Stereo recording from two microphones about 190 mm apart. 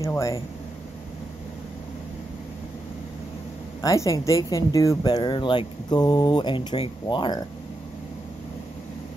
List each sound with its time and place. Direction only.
0.0 s speech: 15° left (ahead or behind)
3.8 s speech: 15° left (ahead or behind)